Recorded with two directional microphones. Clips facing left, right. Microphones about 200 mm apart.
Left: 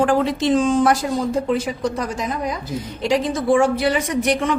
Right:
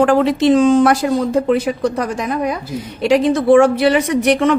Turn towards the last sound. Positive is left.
turn(degrees=-70)  # may be behind; listen again after turning